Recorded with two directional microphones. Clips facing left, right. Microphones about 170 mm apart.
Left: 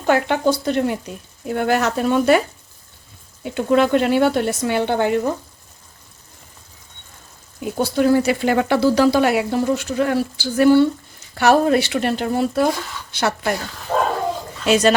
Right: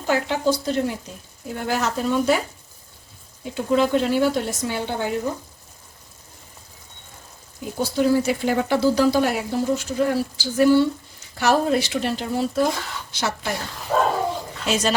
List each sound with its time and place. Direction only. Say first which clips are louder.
0.0 s speech: left 4 dB; 60° left (ahead or behind)
3.5 s speech: left 3 dB; 65° left (ahead or behind)
7.8 s speech: left 3 dB; 60° left (ahead or behind)
14.7 s speech: left 7 dB; 65° left (ahead or behind)